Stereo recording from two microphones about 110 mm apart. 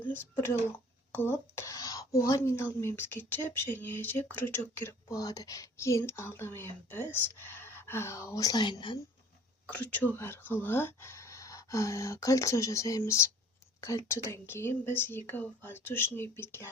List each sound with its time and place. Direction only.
1.1 s speech: 20° left (ahead or behind)
5.1 s speech: 35° left (ahead or behind)
9.6 s speech: 15° left (ahead or behind)